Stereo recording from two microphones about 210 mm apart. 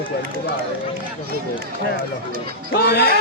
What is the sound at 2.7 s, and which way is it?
Speech, 50° left (ahead or behind).